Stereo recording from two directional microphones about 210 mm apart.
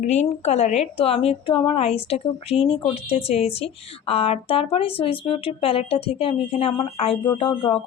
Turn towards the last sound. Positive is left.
turn(degrees=25)  # may be behind; listen again after turning